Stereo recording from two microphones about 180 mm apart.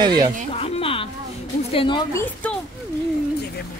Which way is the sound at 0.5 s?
35° left (ahead or behind).